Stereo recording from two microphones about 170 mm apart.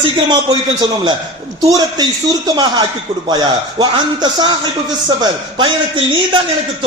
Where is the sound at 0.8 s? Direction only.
25° right (ahead or behind).